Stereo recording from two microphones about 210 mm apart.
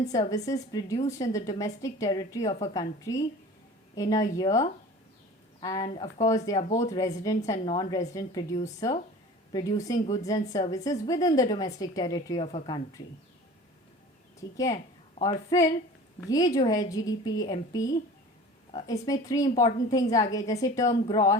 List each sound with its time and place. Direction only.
0.1 s a woman's voice: 15° left (ahead or behind)
6.6 s speech: 35° left (ahead or behind)
6.8 s a woman's voice: 15° left (ahead or behind)
14.5 s a woman's voice: 15° left (ahead or behind)